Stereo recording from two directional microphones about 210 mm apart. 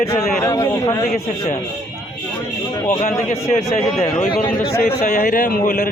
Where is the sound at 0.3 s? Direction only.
15° left (ahead or behind).